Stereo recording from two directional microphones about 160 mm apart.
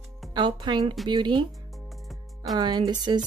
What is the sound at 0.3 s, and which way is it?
Speech, 30° right (ahead or behind).